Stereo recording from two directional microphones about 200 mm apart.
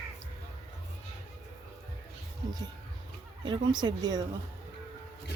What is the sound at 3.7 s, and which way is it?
Speech, 20° right (ahead or behind).